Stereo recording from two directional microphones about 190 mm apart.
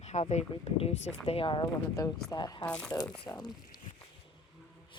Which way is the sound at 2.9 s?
20° left (ahead or behind).